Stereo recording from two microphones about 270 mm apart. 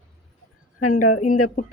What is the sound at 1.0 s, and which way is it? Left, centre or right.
Speech, left.